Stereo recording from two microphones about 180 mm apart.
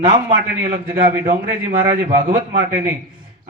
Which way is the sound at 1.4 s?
50° right (ahead or behind).